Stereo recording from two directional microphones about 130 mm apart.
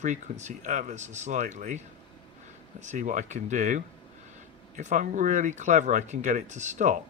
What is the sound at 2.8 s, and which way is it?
Speech, 70° right (ahead or behind).